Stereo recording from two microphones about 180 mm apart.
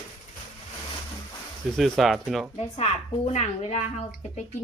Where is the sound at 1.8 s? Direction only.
Centre (ahead or behind).